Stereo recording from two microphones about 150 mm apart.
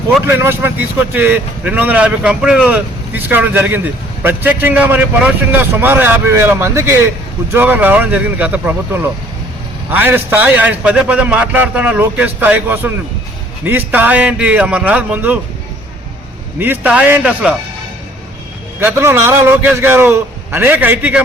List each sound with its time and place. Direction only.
0.3 s a man's voice: 15° right (ahead or behind)
16.6 s a man's voice: 10° right (ahead or behind)
18.8 s a man's voice: 15° right (ahead or behind)